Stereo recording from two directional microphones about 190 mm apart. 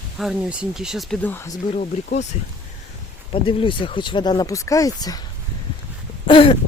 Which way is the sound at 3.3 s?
25° left (ahead or behind).